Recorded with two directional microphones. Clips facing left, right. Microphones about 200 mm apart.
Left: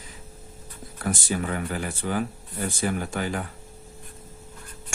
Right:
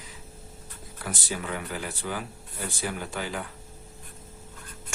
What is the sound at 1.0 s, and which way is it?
Speech, 50° left (ahead or behind).